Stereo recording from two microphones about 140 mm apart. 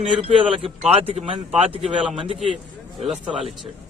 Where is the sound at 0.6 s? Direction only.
45° right (ahead or behind).